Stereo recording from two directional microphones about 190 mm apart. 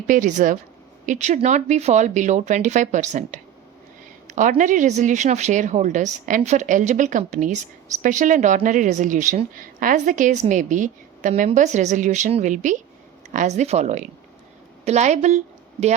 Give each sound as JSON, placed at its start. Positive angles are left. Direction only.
{"t": 0.1, "sound": "a woman's voice", "side_deg": -40}